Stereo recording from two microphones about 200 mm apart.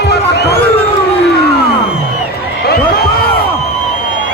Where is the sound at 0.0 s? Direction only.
55° left (ahead or behind).